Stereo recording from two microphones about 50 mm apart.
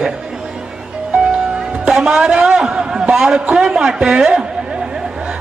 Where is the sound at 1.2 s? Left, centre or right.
Centre.